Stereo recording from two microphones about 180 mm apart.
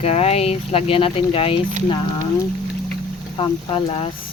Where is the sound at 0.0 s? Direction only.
35° left (ahead or behind).